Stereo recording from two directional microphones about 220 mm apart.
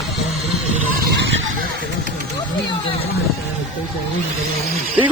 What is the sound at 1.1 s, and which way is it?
Fowl, 55° right (ahead or behind).